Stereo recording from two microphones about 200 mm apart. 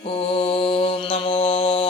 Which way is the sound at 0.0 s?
30° left (ahead or behind).